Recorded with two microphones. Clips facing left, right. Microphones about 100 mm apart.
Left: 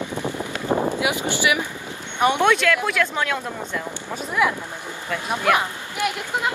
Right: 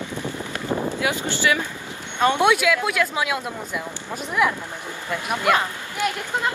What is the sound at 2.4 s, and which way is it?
Speech, 10° right (ahead or behind).